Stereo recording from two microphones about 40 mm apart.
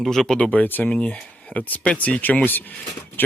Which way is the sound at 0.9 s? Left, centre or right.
Left.